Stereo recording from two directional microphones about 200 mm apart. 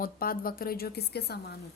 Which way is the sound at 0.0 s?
45° left (ahead or behind).